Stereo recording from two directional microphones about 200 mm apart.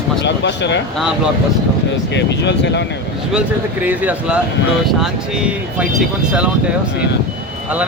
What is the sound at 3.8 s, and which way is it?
A woman's voice, 10° right (ahead or behind).